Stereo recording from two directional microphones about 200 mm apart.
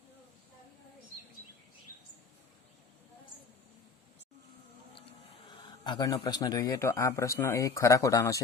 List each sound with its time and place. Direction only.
5.6 s speech: 20° left (ahead or behind)